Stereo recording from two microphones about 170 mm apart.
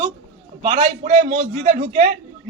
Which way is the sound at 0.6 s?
45° right (ahead or behind).